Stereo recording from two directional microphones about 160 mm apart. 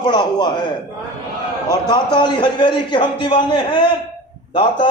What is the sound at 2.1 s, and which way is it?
A man's voice, 30° left (ahead or behind).